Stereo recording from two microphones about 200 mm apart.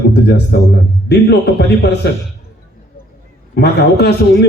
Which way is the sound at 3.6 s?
55° left (ahead or behind).